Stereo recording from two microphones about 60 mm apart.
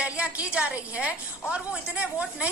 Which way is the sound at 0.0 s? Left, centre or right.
Right.